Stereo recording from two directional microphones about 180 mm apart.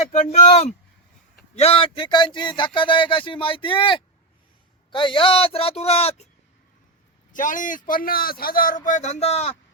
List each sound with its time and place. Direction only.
0.1 s a man's voice: 40° left (ahead or behind)
7.3 s speech: 45° left (ahead or behind)